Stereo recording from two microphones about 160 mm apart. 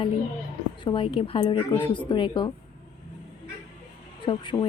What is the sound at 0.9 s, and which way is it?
A woman's voice, 35° left (ahead or behind).